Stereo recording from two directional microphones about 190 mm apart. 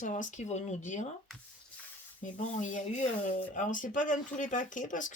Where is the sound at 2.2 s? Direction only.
40° left (ahead or behind).